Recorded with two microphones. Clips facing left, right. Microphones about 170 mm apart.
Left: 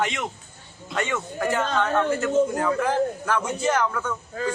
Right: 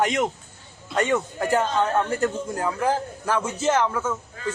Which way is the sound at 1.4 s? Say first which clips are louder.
Left 1 dB; 35° right (ahead or behind).